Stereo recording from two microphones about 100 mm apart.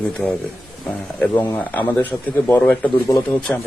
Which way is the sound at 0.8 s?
15° left (ahead or behind).